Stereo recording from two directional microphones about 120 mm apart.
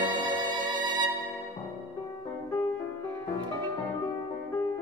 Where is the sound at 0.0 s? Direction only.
40° right (ahead or behind).